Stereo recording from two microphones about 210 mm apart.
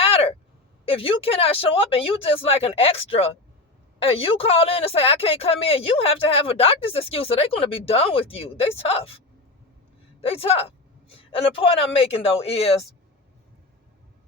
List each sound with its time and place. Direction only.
0.0 s a sound: 25° left (ahead or behind)
0.9 s speech: 25° left (ahead or behind)
10.2 s speech: 25° left (ahead or behind)